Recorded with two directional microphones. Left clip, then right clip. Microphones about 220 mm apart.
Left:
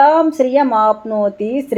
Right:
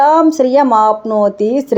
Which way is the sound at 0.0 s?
20° right (ahead or behind).